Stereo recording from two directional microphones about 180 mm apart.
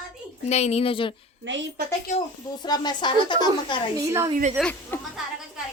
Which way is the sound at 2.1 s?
25° left (ahead or behind).